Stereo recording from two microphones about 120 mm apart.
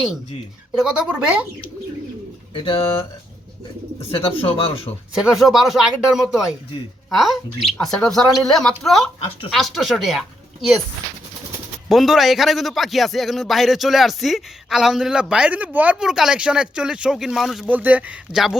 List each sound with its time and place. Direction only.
0.7 s speech: 10° right (ahead or behind)
2.5 s speech: 45° left (ahead or behind)
4.0 s speech: 50° left (ahead or behind)
5.2 s speech: 5° right (ahead or behind)
11.9 s speech: centre (ahead or behind)
17.7 s speech: 15° right (ahead or behind)